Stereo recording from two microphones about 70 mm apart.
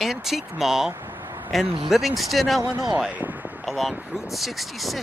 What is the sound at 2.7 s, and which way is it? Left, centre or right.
Speech, right.